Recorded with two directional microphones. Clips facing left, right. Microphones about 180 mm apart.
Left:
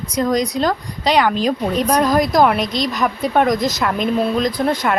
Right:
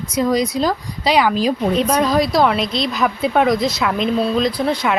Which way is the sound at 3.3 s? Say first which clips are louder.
Even; 5° right (ahead or behind).